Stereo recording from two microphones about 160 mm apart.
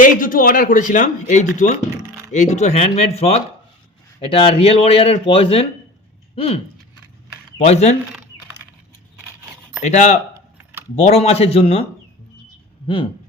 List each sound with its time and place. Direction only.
0.0 s speech: 60° left (ahead or behind); by 6.6 s 35° left (ahead or behind)
7.6 s speech: 45° left (ahead or behind)
9.8 s speech: 45° left (ahead or behind)
10.6 s a sound: 15° right (ahead or behind)
10.9 s speech: 40° left (ahead or behind)